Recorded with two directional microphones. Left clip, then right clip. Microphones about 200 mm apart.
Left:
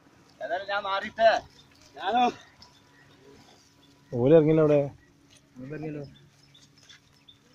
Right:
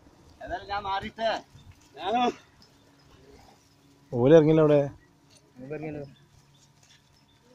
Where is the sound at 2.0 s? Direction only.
40° right (ahead or behind).